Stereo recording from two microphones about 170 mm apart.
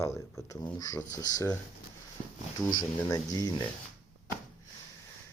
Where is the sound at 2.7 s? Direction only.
20° left (ahead or behind).